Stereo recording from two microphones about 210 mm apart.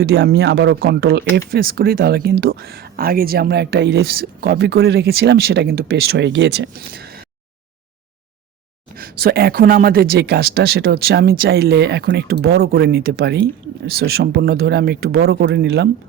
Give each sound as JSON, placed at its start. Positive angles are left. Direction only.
{"t": 0.0, "sound": "speech", "side_deg": -50}
{"t": 9.0, "sound": "speech", "side_deg": -45}